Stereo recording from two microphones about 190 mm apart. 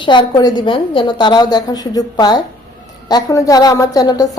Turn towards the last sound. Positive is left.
turn(degrees=20)  # may be behind; listen again after turning